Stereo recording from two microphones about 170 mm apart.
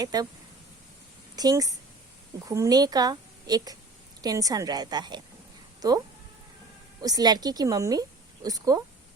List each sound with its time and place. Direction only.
0.0 s a woman's voice: 20° right (ahead or behind)
1.4 s a woman's voice: 20° right (ahead or behind)
7.0 s a woman's voice: 20° right (ahead or behind)